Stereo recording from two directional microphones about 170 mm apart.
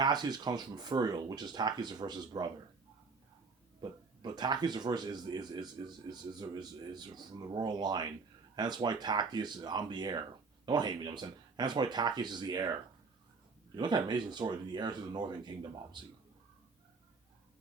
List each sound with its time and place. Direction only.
0.0 s speech: 25° right (ahead or behind)
3.8 s speech: 25° right (ahead or behind)
13.7 s speech: 25° right (ahead or behind)